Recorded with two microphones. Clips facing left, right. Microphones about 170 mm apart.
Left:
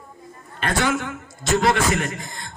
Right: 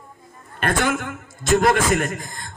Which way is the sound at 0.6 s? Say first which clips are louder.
Right 1 dB; 50° right (ahead or behind).